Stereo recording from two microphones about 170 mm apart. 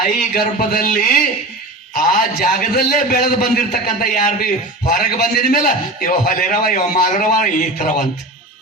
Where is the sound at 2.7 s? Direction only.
65° left (ahead or behind).